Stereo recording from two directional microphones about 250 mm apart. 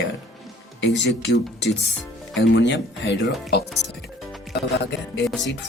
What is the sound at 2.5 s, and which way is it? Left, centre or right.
Speech, left.